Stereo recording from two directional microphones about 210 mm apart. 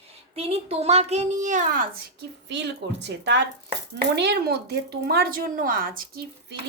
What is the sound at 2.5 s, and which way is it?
Speech, 55° right (ahead or behind).